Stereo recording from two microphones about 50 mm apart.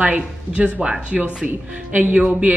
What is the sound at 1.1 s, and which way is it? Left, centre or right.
Speech, right.